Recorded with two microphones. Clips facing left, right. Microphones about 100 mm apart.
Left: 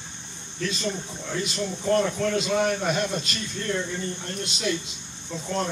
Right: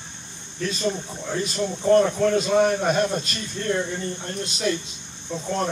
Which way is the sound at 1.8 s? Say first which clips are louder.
Right 6 dB; 35° right (ahead or behind).